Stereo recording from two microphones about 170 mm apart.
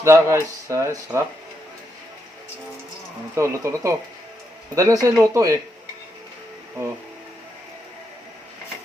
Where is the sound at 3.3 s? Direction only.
15° right (ahead or behind).